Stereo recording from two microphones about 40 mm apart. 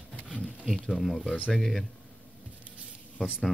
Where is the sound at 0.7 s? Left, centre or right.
Centre.